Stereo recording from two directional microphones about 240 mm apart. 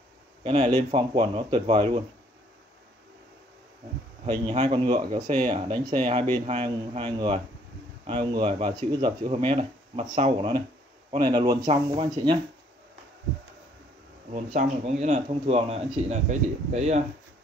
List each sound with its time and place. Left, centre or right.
0.4 s speech: right
4.3 s speech: right
14.3 s speech: right